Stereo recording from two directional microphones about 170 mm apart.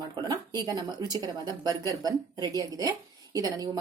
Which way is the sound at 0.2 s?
25° right (ahead or behind).